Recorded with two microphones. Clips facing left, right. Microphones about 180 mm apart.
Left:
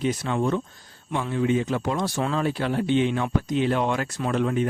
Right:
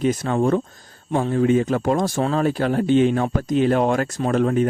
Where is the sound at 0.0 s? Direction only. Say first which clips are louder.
Right 5 dB; 45° right (ahead or behind).